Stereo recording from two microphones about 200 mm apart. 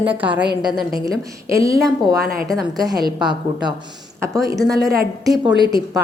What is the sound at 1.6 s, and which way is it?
A woman's voice, 15° right (ahead or behind).